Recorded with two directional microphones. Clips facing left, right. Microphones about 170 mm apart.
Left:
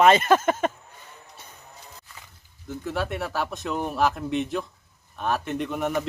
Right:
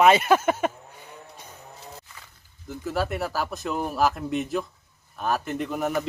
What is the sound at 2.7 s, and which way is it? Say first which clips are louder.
Speech: right 1 dB; centre (ahead or behind).